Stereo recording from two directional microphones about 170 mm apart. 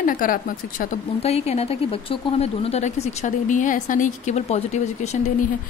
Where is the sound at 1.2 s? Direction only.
40° left (ahead or behind).